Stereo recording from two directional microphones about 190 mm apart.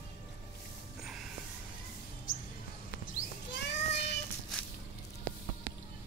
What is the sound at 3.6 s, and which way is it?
Child singing, 65° left (ahead or behind).